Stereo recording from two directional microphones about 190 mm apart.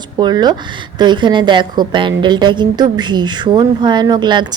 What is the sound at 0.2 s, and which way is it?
A woman's voice, 20° right (ahead or behind).